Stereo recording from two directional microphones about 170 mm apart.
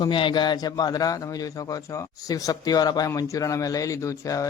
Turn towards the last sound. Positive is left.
turn(degrees=20)  # may be behind; listen again after turning